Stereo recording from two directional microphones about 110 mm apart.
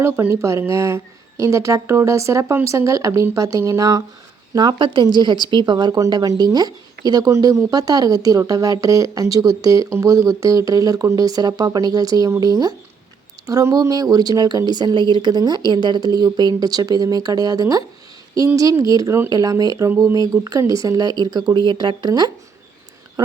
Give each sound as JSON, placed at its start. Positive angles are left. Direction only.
{"t": 0.0, "sound": "speech", "side_deg": -25}
{"t": 4.5, "sound": "speech", "side_deg": -40}